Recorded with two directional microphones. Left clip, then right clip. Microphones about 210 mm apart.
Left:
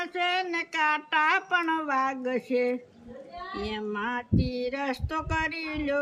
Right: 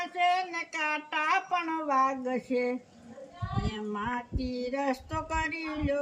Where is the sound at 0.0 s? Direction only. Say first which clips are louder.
Even; 5° left (ahead or behind).